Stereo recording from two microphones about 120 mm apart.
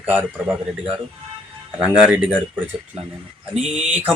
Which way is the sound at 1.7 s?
10° right (ahead or behind).